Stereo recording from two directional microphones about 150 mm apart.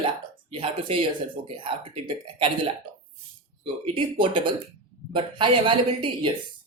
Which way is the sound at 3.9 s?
35° right (ahead or behind).